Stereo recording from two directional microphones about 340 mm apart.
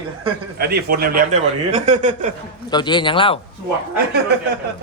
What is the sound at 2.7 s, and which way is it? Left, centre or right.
Speech, centre.